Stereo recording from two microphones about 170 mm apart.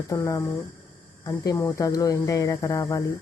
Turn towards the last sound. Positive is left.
turn(degrees=20)  # may be behind; listen again after turning